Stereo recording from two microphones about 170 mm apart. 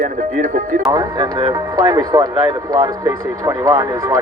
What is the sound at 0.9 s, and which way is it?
Speech, 25° right (ahead or behind).